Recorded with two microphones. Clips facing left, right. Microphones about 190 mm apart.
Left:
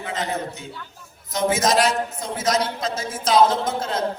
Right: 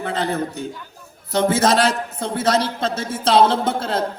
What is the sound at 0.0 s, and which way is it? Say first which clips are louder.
A man's voice: right 4 dB; 35° right (ahead or behind).